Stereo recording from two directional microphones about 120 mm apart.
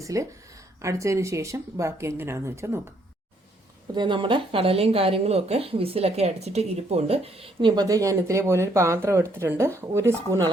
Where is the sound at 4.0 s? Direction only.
45° right (ahead or behind); by 10.4 s 20° right (ahead or behind).